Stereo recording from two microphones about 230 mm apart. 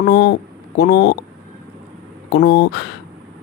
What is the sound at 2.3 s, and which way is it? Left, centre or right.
Speech, left.